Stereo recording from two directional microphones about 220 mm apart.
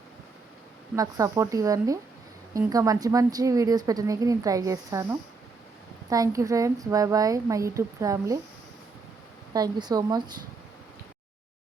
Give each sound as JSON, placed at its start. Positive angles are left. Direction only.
{"t": 0.9, "sound": "a woman's voice", "side_deg": -15}
{"t": 6.1, "sound": "a woman's voice", "side_deg": -15}
{"t": 9.5, "sound": "a woman's voice", "side_deg": -15}